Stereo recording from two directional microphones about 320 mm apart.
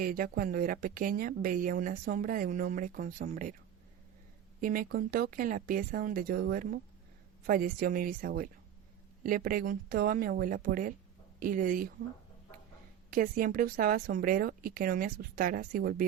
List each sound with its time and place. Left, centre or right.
0.0 s a woman's voice: right
4.6 s a woman's voice: right
13.1 s a woman's voice: right